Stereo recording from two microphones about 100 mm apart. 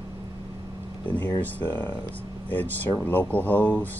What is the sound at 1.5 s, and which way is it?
Speech, 20° left (ahead or behind).